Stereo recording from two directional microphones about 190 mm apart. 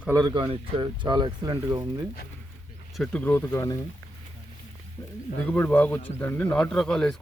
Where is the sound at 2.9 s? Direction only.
5° left (ahead or behind).